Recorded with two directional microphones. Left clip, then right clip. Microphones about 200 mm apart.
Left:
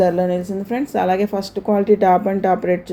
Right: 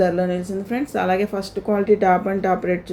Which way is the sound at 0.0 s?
20° left (ahead or behind).